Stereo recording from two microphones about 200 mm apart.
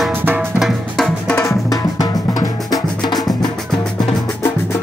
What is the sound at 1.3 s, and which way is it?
Drum, 15° left (ahead or behind).